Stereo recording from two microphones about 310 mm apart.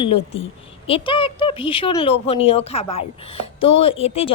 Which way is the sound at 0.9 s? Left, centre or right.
Centre.